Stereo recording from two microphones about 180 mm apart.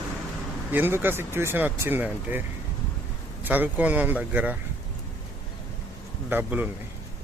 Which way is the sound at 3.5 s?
10° right (ahead or behind).